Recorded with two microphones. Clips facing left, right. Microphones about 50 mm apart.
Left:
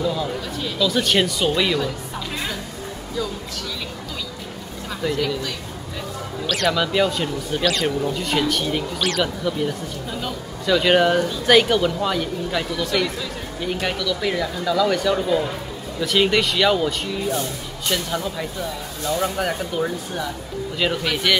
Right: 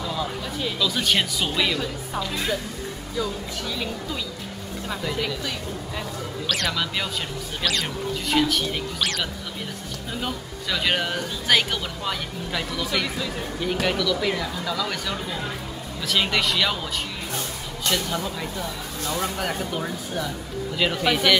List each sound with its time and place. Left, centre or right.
0.0 s speech: centre
5.0 s speech: centre
6.4 s speech: centre
10.7 s speech: centre
15.1 s speech: centre